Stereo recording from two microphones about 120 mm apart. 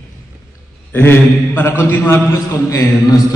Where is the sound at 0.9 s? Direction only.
20° left (ahead or behind).